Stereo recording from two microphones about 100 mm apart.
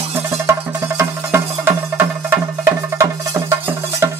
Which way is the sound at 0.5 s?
25° right (ahead or behind).